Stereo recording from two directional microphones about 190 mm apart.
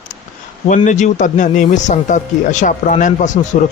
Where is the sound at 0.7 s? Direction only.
40° left (ahead or behind).